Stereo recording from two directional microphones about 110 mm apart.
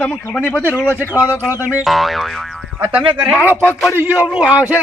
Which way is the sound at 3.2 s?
15° right (ahead or behind).